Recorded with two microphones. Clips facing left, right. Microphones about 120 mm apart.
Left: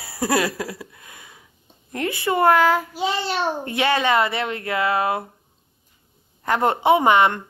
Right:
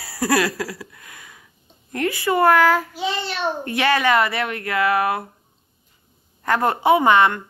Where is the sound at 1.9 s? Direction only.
20° left (ahead or behind).